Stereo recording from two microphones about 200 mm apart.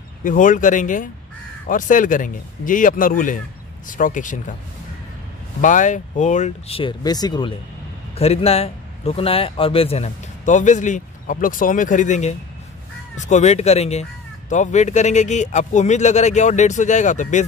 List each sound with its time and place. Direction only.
0.2 s a man's voice: 40° left (ahead or behind)
5.6 s a man's voice: 40° left (ahead or behind)